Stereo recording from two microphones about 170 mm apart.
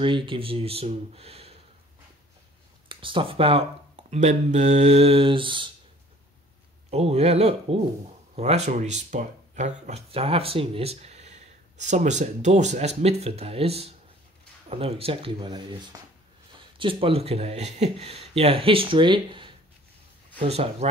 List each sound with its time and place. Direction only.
0.0 s speech: 30° right (ahead or behind)
2.9 s speech: 30° right (ahead or behind)
6.9 s speech: 40° right (ahead or behind)